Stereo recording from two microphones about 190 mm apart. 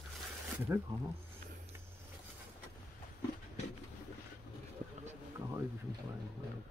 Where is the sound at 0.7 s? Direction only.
15° right (ahead or behind).